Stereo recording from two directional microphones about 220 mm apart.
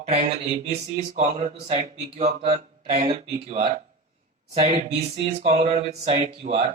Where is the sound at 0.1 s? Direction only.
30° right (ahead or behind).